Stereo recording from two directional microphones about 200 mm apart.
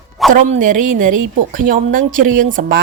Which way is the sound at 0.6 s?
40° right (ahead or behind).